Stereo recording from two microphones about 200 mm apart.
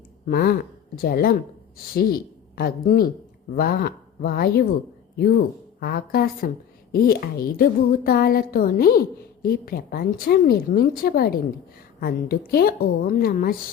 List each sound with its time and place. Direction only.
0.3 s a woman's voice: 45° left (ahead or behind)
5.8 s a woman's voice: 50° left (ahead or behind)